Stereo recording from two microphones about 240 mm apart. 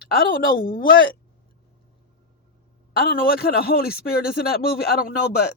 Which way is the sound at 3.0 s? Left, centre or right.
Left.